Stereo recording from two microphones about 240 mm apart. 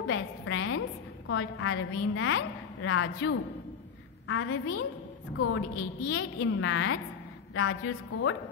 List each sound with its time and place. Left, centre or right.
0.0 s a woman's voice: left
6.0 s a woman's voice: left